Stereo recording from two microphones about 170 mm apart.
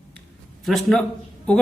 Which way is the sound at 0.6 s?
Centre (ahead or behind).